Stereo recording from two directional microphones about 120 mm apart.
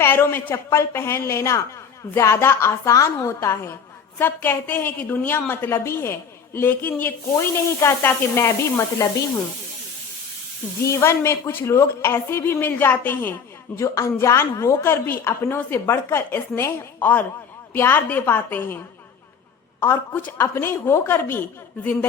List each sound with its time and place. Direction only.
0.0 s a woman's voice: 20° left (ahead or behind)
10.8 s a woman's voice: 25° left (ahead or behind)
19.8 s a woman's voice: 15° left (ahead or behind)